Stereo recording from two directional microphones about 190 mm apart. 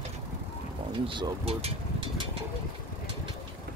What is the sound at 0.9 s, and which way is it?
Speech, 25° right (ahead or behind).